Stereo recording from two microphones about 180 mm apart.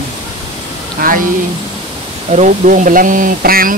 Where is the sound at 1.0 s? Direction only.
55° right (ahead or behind).